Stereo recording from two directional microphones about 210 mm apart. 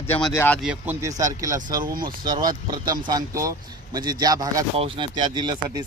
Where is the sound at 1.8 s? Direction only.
45° right (ahead or behind).